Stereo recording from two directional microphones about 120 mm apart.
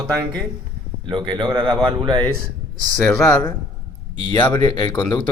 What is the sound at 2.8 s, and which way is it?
Speech, 5° left (ahead or behind).